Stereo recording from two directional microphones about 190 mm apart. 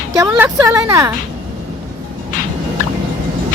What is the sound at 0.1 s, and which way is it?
Speech, 15° right (ahead or behind).